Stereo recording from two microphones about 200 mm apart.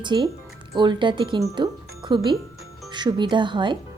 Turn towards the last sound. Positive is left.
turn(degrees=-25)  # may be behind; listen again after turning